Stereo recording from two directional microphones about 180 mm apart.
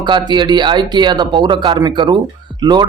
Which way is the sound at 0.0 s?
25° right (ahead or behind).